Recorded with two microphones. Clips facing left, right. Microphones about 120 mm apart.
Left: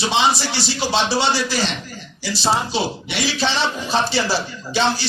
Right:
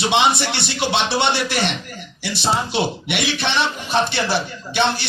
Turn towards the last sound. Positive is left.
turn(degrees=-60)  # may be behind; listen again after turning